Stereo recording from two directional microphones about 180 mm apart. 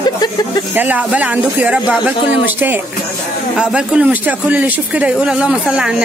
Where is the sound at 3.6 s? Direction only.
5° right (ahead or behind).